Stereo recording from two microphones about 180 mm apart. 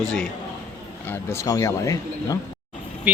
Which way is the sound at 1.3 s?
20° left (ahead or behind).